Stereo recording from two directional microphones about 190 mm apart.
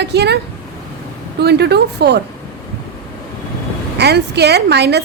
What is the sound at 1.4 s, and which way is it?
Speech, 60° right (ahead or behind).